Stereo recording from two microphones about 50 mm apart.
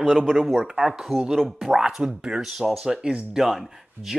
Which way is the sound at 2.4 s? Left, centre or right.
Centre.